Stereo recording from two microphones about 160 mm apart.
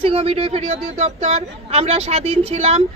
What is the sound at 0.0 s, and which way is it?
A woman's voice, 35° right (ahead or behind).